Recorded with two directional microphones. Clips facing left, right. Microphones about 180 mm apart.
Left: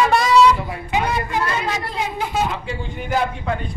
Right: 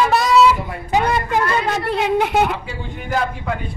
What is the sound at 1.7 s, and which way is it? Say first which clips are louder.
Speech: right 7 dB; 70° right (ahead or behind).